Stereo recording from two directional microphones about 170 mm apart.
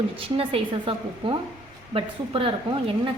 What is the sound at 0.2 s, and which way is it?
A woman's voice, 35° right (ahead or behind).